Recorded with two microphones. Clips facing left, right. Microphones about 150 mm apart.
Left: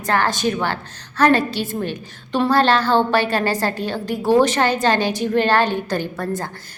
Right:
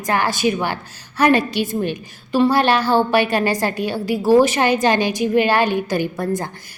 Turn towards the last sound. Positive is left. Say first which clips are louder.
# right 3 dB
turn(degrees=-15)  # may be behind; listen again after turning